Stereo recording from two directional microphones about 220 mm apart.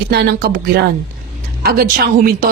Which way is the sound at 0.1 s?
45° right (ahead or behind).